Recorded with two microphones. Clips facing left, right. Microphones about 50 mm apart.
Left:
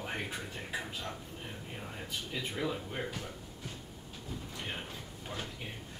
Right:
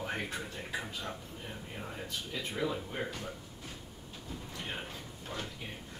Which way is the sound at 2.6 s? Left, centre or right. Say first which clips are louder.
Right 2 dB; centre.